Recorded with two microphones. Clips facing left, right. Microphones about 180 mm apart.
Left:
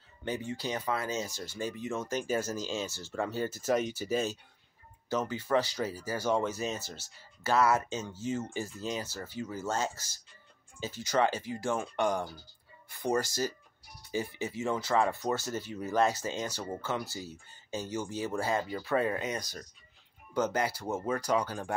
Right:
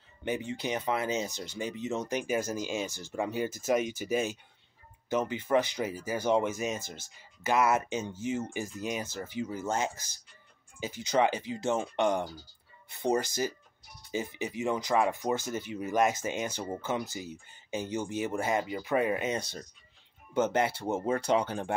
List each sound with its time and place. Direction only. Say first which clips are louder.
0.2 s speech: right 2 dB; 20° right (ahead or behind)